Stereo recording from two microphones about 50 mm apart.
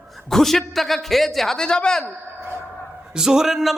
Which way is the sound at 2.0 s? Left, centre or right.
Right.